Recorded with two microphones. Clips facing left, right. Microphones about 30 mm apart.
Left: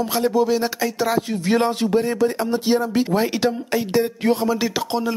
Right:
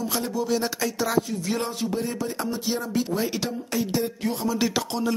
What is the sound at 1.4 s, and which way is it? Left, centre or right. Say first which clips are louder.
Speech: left 8 dB; left.